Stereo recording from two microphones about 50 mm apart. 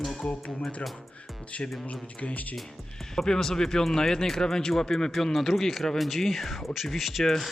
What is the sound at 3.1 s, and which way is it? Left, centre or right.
Speech, centre.